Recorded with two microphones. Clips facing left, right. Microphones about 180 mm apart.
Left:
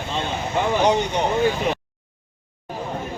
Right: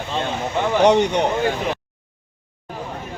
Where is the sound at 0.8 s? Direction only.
70° right (ahead or behind).